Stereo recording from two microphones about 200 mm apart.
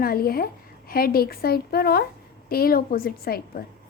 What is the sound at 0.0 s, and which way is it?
A woman's voice, 50° left (ahead or behind).